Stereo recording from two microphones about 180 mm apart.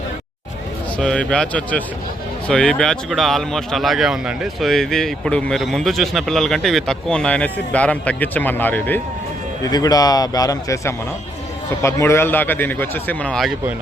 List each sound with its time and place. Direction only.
0.9 s speech: 5° left (ahead or behind)
9.6 s speech: 20° left (ahead or behind); by 13.5 s 5° left (ahead or behind)